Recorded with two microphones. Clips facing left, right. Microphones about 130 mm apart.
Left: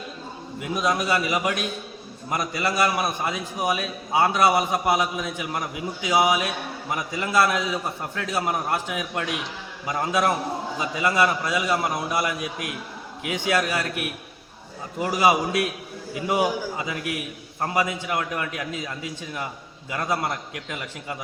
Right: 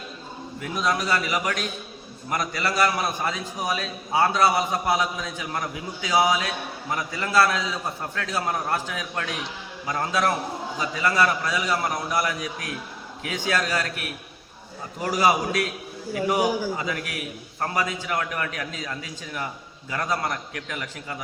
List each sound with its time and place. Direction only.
0.6 s a man's voice: 20° left (ahead or behind)